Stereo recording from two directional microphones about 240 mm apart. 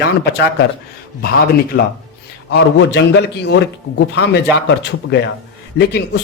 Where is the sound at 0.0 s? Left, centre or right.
Left.